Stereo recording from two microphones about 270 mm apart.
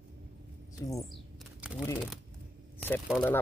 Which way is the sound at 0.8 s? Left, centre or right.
Centre.